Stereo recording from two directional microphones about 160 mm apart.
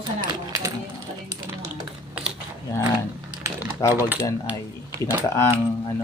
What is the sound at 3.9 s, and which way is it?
Speech, 10° right (ahead or behind).